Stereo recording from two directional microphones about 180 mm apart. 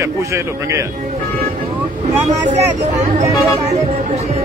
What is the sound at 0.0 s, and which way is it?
Speech, 15° right (ahead or behind).